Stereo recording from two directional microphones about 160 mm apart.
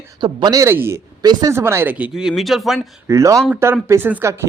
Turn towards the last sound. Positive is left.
turn(degrees=-15)  # may be behind; listen again after turning